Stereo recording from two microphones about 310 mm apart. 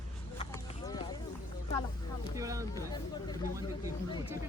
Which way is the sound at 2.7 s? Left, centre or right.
Centre.